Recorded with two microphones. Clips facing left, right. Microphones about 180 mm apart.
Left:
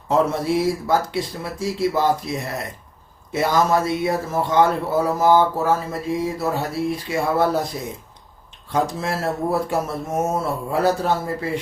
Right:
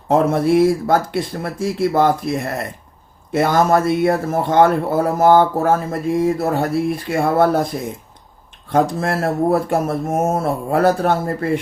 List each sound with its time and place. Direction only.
0.1 s speech: 55° right (ahead or behind)
9.0 s speech: 55° right (ahead or behind)